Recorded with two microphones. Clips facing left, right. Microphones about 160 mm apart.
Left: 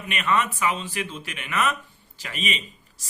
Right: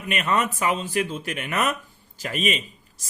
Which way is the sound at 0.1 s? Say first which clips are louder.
Right 1 dB; 40° right (ahead or behind).